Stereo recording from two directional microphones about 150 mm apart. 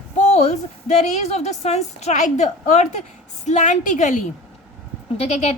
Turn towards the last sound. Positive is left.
turn(degrees=50)  # may be behind; listen again after turning